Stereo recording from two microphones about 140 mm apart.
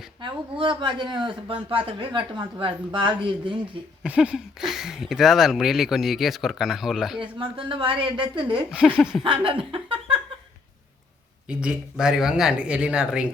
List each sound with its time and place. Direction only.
0.2 s speech: 35° right (ahead or behind)
4.0 s speech: 5° right (ahead or behind)
7.2 s speech: 35° right (ahead or behind)
8.7 s speech: 5° right (ahead or behind)
9.2 s speech: 40° right (ahead or behind)
11.4 s speech: 5° right (ahead or behind)